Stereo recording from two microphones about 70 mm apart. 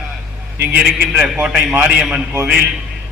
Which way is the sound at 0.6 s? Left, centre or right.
Right.